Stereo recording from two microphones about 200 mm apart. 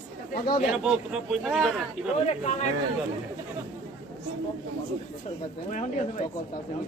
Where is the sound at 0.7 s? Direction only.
5° right (ahead or behind).